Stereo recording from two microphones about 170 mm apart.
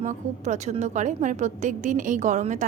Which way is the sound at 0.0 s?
45° right (ahead or behind).